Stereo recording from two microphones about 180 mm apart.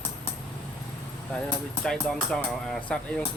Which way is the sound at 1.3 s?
5° left (ahead or behind).